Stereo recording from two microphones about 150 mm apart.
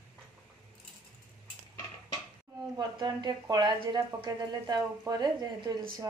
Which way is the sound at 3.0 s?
30° right (ahead or behind).